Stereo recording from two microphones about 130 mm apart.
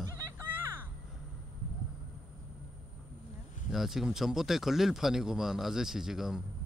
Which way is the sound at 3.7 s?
Centre (ahead or behind).